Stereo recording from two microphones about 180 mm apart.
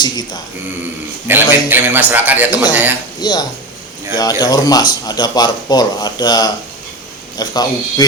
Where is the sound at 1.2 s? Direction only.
10° right (ahead or behind).